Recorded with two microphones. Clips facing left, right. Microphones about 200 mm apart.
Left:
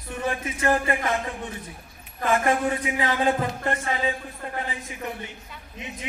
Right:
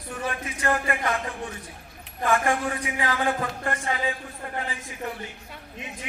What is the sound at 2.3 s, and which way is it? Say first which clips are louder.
Speech: left 2 dB; 25° left (ahead or behind).